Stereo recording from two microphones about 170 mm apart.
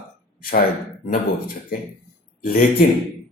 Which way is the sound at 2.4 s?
55° left (ahead or behind).